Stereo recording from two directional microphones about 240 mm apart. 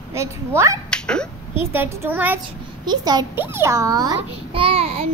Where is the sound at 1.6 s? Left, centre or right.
Centre.